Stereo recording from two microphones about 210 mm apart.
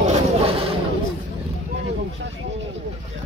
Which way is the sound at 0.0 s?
30° right (ahead or behind).